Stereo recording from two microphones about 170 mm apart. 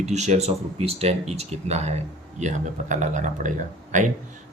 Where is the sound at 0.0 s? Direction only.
40° right (ahead or behind).